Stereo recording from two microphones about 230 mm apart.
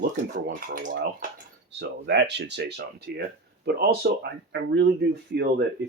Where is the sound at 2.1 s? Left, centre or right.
Right.